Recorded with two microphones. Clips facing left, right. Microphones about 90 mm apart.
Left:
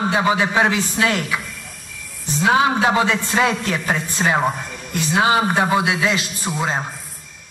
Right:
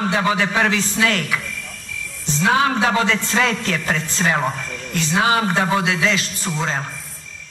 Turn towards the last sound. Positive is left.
turn(degrees=15)  # may be behind; listen again after turning